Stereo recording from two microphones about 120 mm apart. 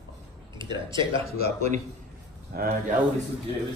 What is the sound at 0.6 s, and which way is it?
Speech, 40° right (ahead or behind).